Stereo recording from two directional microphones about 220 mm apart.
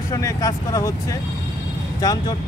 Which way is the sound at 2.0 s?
15° left (ahead or behind).